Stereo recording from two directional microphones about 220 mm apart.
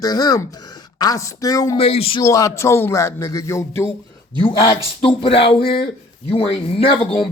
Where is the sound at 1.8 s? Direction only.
25° left (ahead or behind).